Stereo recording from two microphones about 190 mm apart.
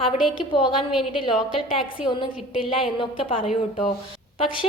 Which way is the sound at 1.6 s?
30° left (ahead or behind).